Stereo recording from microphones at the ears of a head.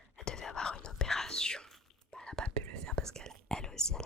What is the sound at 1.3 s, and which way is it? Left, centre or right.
Speech, centre.